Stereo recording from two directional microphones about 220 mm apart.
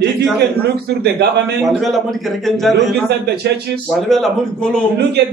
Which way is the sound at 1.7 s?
Centre (ahead or behind).